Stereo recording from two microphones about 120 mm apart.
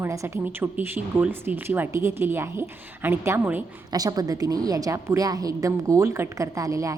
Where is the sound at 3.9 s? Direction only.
30° right (ahead or behind).